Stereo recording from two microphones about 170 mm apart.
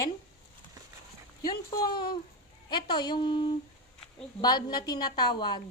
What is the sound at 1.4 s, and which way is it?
Speech, 20° left (ahead or behind).